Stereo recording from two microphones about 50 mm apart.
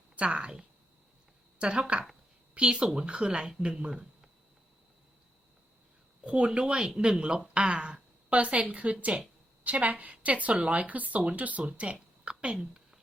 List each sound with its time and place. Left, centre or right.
0.2 s speech: right
6.2 s speech: right
12.2 s a sound: right